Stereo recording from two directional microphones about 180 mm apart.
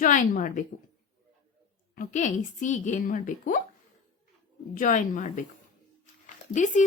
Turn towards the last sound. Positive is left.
turn(degrees=45)  # may be behind; listen again after turning